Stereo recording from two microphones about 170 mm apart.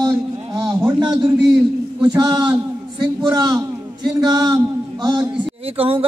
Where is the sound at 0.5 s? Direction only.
20° right (ahead or behind).